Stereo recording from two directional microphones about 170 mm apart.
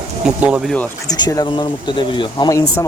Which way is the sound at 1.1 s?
20° left (ahead or behind).